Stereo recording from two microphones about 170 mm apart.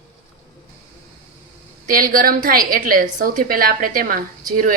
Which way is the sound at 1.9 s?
55° right (ahead or behind).